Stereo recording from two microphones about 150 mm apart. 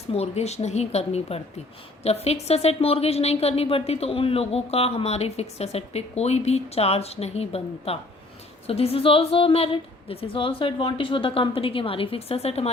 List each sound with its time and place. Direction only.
0.1 s a woman's voice: 45° left (ahead or behind)